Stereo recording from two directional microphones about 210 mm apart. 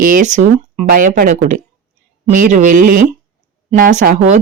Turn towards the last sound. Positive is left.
turn(degrees=-35)  # may be behind; listen again after turning